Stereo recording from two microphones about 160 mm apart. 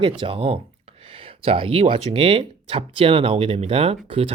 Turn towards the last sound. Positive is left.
turn(degrees=-35)  # may be behind; listen again after turning